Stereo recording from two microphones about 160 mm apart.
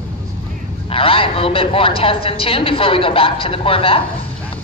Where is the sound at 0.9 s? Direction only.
35° left (ahead or behind).